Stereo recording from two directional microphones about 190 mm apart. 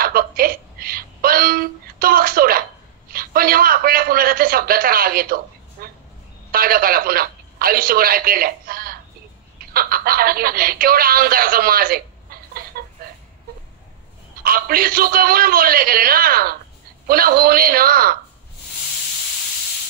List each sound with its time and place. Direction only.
0.0 s a sound: 50° right (ahead or behind)
6.5 s speech: 50° right (ahead or behind)
14.4 s a man's voice: 50° right (ahead or behind)